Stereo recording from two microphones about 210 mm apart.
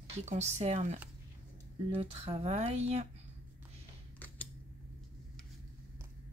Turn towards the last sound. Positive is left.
turn(degrees=10)  # may be behind; listen again after turning